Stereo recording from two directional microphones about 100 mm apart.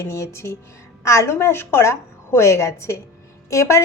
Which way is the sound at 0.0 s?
30° left (ahead or behind).